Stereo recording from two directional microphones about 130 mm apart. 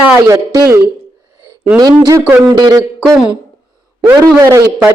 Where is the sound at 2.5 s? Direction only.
30° right (ahead or behind).